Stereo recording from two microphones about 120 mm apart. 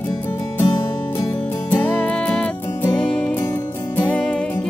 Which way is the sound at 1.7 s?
10° left (ahead or behind).